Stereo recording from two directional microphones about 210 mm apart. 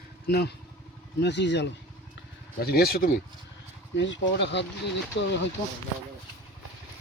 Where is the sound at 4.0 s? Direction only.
60° left (ahead or behind).